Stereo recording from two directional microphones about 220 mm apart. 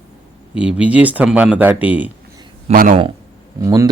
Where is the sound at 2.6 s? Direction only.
35° right (ahead or behind).